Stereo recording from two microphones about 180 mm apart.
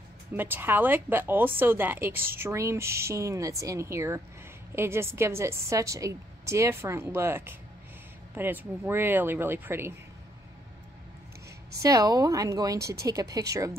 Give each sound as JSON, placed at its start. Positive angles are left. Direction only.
{"t": 0.3, "sound": "a woman's voice", "side_deg": -10}
{"t": 11.8, "sound": "a woman's voice", "side_deg": -20}